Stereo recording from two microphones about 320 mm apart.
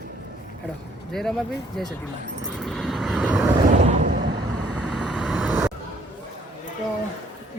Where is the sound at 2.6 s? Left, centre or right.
Centre.